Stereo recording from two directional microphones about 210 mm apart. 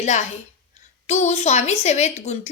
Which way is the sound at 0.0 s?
35° left (ahead or behind).